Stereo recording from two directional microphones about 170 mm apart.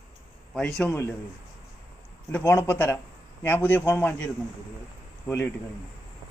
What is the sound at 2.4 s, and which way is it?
A man's voice, 15° left (ahead or behind).